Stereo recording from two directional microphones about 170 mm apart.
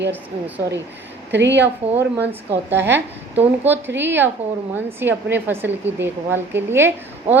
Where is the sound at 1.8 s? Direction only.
10° right (ahead or behind).